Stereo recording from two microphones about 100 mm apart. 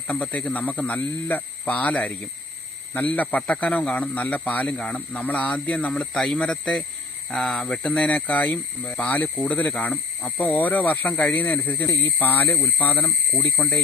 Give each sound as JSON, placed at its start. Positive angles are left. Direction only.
{"t": 0.1, "sound": "a man's voice", "side_deg": 15}